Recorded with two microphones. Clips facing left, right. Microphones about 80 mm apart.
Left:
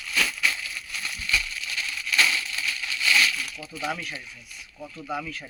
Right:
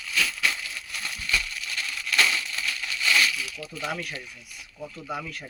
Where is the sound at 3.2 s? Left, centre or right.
Centre.